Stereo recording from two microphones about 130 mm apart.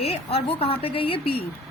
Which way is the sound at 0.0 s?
45° left (ahead or behind).